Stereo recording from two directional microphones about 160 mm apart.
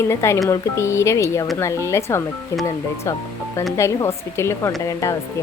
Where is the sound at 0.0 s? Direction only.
15° left (ahead or behind).